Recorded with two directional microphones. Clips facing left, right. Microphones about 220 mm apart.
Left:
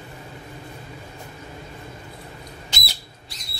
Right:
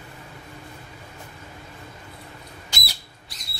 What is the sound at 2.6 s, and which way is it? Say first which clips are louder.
Whistle: right 1 dB; 25° left (ahead or behind).